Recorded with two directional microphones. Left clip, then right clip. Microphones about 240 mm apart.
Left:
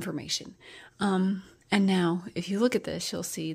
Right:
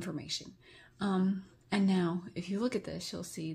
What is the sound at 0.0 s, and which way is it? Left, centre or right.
Speech, left.